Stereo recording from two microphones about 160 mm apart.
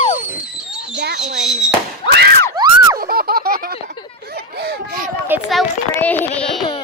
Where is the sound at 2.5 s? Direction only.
25° right (ahead or behind).